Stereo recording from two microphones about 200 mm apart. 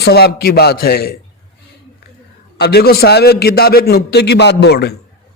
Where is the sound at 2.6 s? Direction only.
55° left (ahead or behind).